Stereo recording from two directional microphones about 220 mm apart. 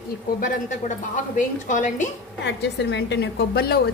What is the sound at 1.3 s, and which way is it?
Speech, 35° left (ahead or behind).